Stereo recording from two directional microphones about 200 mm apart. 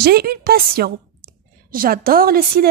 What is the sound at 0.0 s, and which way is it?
A woman's voice, 50° right (ahead or behind).